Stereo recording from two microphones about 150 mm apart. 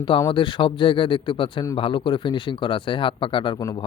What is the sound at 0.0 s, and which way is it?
Speech, 30° left (ahead or behind).